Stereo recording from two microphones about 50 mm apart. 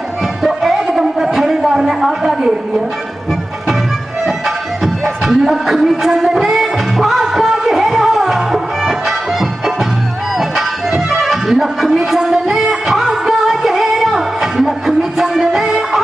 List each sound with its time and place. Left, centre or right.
0.4 s a sound: centre
5.2 s music: centre
10.5 s music: centre